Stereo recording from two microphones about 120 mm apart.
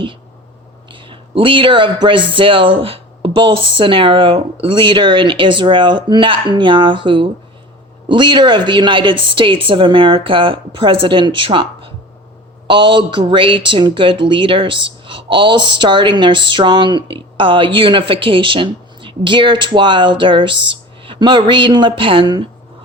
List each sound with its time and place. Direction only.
0.9 s speech: 45° right (ahead or behind)